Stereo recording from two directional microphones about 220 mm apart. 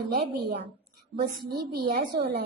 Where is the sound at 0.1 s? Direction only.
50° right (ahead or behind).